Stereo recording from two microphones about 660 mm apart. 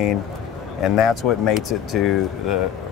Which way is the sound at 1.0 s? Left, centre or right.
Left.